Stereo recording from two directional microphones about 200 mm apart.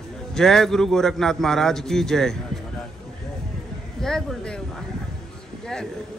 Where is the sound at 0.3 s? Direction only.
Centre (ahead or behind).